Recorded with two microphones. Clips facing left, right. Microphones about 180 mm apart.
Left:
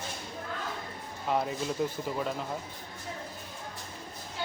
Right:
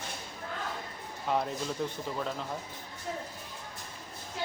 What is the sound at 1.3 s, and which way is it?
Speech, 5° left (ahead or behind).